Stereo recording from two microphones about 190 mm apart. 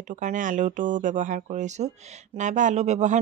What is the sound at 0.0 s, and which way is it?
Speech, 40° right (ahead or behind).